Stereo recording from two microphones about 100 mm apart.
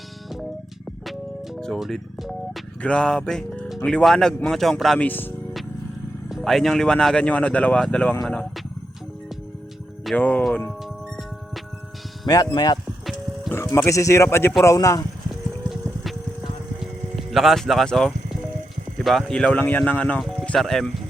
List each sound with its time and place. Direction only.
1.6 s a man's voice: 5° left (ahead or behind)
4.9 s speech: 20° left (ahead or behind)
6.2 s speech: centre (ahead or behind)
10.2 s speech: 15° left (ahead or behind)
12.2 s speech: 40° left (ahead or behind)
13.5 s speech: 25° left (ahead or behind)
15.3 s a sound: centre (ahead or behind)
18.9 s speech: centre (ahead or behind)